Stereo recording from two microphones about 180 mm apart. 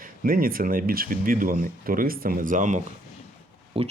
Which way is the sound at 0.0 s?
50° right (ahead or behind).